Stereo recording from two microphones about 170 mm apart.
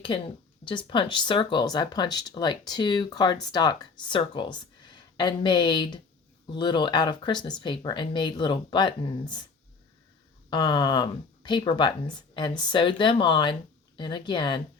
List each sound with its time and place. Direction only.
0.6 s speech: 30° left (ahead or behind)
10.5 s speech: 25° left (ahead or behind)